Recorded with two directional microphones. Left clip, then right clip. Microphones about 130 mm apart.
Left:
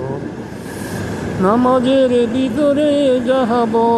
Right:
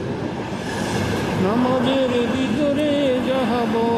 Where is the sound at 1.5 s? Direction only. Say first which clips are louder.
Left 8 dB; 15° left (ahead or behind).